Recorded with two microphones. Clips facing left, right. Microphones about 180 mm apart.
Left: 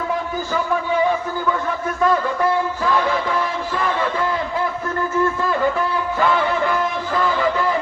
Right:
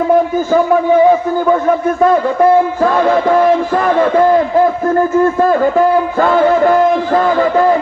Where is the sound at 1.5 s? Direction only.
45° right (ahead or behind).